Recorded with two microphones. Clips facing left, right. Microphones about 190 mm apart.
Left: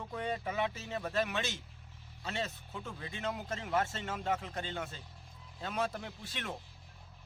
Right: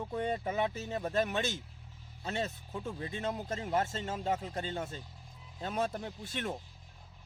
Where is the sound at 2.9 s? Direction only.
35° right (ahead or behind).